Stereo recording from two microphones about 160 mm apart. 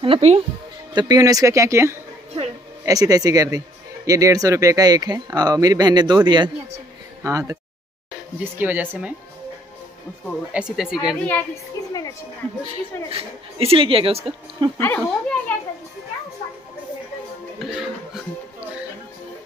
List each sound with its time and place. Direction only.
0.0 s speech: 40° right (ahead or behind)
0.9 s speech: 25° right (ahead or behind)
8.5 s speech: 10° right (ahead or behind)
10.5 s a woman's voice: 5° right (ahead or behind)
11.8 s a woman's voice: 20° left (ahead or behind)
13.1 s speech: 35° right (ahead or behind)
14.8 s speech: 10° left (ahead or behind)
17.6 s music: centre (ahead or behind)